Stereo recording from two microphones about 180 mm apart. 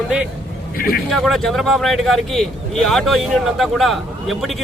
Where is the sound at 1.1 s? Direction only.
Centre (ahead or behind).